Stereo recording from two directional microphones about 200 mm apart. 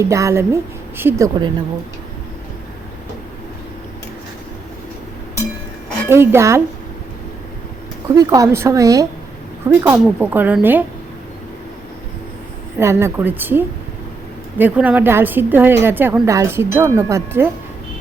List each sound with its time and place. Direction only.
0.0 s a woman's voice: 15° right (ahead or behind)
6.1 s a woman's voice: 10° right (ahead or behind)
8.1 s a woman's voice: 15° right (ahead or behind)
12.8 s a woman's voice: 15° right (ahead or behind)